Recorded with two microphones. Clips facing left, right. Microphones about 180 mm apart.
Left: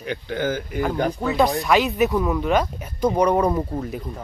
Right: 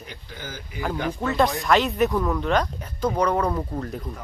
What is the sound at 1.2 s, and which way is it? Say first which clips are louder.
Speech: left 1 dB; centre (ahead or behind).